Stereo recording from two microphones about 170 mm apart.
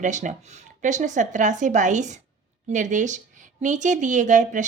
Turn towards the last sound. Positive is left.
turn(degrees=-45)  # may be behind; listen again after turning